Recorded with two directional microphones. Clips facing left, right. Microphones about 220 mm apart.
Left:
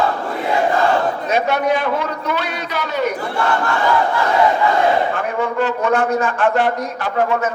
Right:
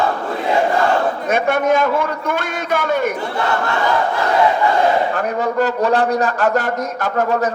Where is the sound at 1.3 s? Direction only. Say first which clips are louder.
Right 2 dB; 50° right (ahead or behind).